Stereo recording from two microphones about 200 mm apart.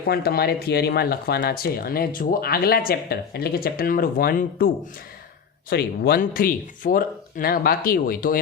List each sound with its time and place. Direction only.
0.1 s speech: 50° left (ahead or behind)